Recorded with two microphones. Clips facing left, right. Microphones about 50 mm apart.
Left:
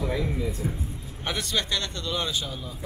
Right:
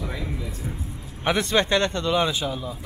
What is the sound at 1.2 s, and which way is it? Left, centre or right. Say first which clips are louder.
A man's voice: right 8 dB; right.